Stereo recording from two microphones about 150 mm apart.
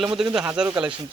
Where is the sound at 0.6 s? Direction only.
5° right (ahead or behind).